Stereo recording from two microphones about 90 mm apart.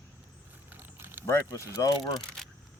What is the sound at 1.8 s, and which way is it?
Speech, 40° left (ahead or behind).